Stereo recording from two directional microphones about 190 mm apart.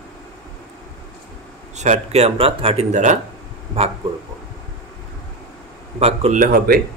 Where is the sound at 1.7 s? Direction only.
35° right (ahead or behind).